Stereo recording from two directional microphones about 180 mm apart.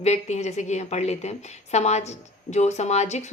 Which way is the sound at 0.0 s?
40° left (ahead or behind).